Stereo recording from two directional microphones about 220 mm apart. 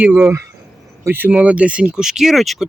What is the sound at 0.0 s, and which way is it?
Speech, 10° right (ahead or behind).